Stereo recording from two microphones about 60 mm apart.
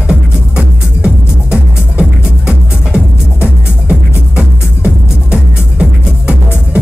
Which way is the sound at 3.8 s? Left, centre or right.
Right.